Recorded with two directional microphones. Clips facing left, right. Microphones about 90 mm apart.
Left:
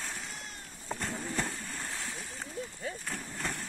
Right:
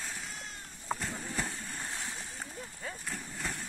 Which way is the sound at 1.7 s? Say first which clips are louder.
Even; 20° right (ahead or behind).